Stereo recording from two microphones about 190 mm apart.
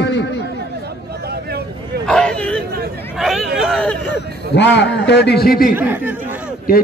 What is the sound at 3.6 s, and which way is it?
Hubbub, centre (ahead or behind).